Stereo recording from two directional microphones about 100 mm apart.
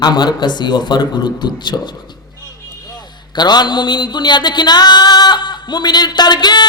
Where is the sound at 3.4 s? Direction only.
45° left (ahead or behind).